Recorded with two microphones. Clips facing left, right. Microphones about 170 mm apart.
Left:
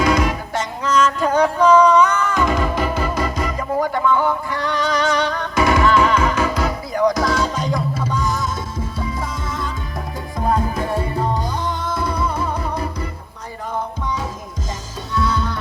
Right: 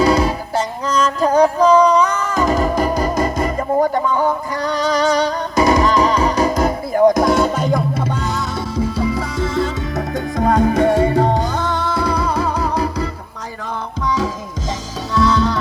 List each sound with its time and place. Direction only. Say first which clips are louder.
0.0 s music: right 3 dB; 35° right (ahead or behind); by 15.5 s 85° right